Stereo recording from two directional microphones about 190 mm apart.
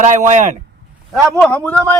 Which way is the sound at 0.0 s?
40° right (ahead or behind).